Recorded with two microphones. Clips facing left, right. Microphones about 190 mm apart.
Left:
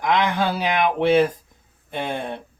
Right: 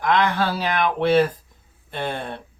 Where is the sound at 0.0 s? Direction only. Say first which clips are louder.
Even; 15° left (ahead or behind).